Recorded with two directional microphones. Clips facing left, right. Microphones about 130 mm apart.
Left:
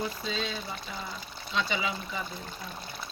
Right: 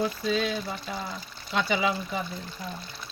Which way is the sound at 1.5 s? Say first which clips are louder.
Right 5 dB; 65° right (ahead or behind).